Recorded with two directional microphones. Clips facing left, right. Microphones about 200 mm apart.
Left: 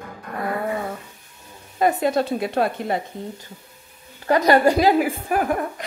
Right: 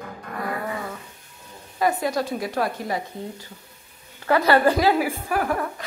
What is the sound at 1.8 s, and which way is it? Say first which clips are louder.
A woman's voice: left 3 dB; 25° left (ahead or behind).